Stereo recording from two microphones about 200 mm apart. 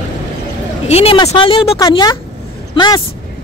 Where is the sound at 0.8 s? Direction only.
30° left (ahead or behind).